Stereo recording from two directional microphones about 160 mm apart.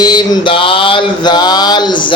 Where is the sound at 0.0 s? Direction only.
30° left (ahead or behind).